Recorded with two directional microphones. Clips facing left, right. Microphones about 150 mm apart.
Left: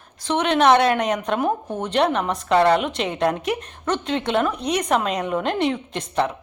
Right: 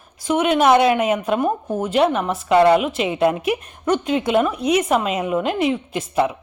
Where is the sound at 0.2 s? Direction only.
10° right (ahead or behind).